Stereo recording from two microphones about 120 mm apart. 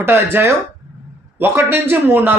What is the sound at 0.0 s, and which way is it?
A man's voice, 20° right (ahead or behind).